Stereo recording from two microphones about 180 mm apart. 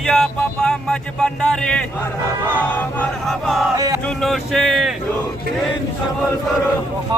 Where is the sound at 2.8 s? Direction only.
5° left (ahead or behind).